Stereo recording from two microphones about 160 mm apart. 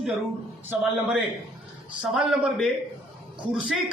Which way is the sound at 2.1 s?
Centre (ahead or behind).